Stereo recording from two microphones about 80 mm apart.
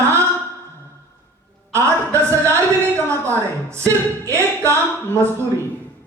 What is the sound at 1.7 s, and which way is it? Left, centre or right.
A woman's voice, right.